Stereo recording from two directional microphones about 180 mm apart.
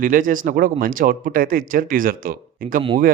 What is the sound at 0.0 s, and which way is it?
A man's voice, 50° right (ahead or behind).